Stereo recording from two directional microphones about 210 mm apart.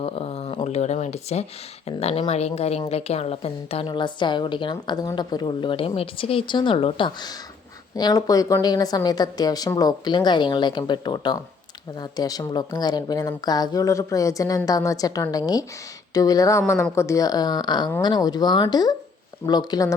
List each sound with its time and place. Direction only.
0.0 s a woman's voice: 30° left (ahead or behind)